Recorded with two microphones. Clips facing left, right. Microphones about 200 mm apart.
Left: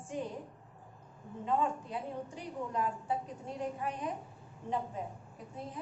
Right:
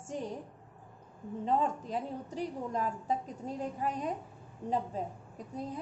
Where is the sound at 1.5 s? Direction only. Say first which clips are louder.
Right 2 dB; 40° right (ahead or behind).